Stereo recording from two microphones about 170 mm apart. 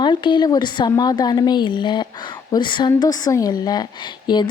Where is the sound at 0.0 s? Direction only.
25° left (ahead or behind).